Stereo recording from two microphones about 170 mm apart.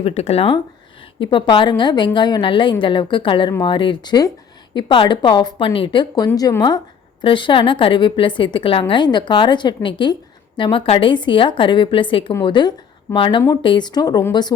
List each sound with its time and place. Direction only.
0.0 s speech: 40° left (ahead or behind); by 14.5 s 20° left (ahead or behind)